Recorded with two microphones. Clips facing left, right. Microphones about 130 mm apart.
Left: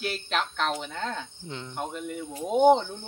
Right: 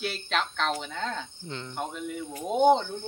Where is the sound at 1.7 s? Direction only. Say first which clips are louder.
Left 1 dB; centre (ahead or behind).